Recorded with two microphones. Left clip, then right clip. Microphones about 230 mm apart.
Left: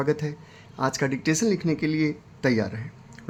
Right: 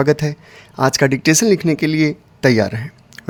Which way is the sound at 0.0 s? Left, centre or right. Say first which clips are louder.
Right 10 dB; right.